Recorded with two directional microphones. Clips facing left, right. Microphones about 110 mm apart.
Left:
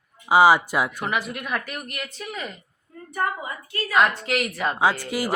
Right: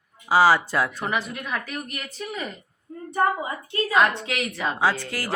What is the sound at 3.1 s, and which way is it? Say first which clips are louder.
Speech: right 4 dB; 25° right (ahead or behind).